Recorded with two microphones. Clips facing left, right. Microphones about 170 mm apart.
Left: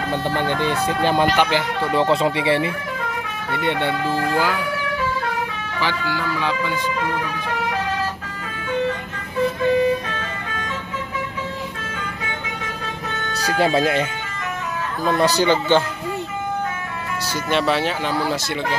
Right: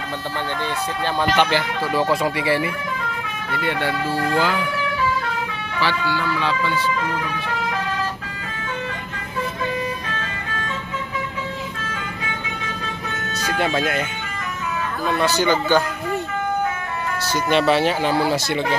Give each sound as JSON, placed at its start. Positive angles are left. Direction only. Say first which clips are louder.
{"t": 0.6, "sound": "speech", "louder": "left 4 dB", "side_deg": 15}
{"t": 5.8, "sound": "speech", "louder": "right 2 dB", "side_deg": 15}
{"t": 13.3, "sound": "speech", "louder": "left 3 dB", "side_deg": 35}
{"t": 15.1, "sound": "speech", "louder": "left 2 dB", "side_deg": 35}
{"t": 17.5, "sound": "speech", "louder": "right 3 dB", "side_deg": 0}